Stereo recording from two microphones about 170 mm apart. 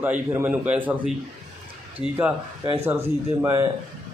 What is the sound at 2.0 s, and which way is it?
Speech, 10° right (ahead or behind).